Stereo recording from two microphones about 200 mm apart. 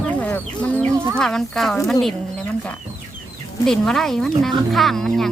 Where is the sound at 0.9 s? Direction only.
10° right (ahead or behind).